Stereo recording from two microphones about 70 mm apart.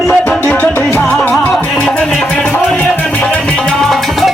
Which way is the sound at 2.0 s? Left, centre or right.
Centre.